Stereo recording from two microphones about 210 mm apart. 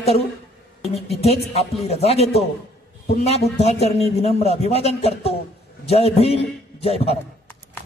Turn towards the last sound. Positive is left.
turn(degrees=30)  # may be behind; listen again after turning